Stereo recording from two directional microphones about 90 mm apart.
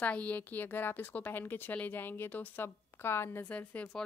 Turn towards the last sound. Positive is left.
turn(degrees=15)  # may be behind; listen again after turning